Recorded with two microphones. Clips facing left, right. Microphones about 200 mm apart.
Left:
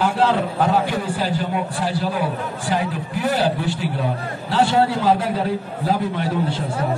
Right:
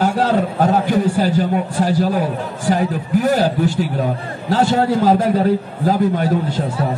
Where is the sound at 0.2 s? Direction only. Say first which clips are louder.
Right 2 dB; 40° right (ahead or behind).